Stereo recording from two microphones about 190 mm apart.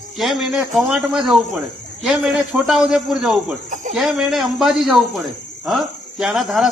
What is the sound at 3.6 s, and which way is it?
Speech, 40° right (ahead or behind).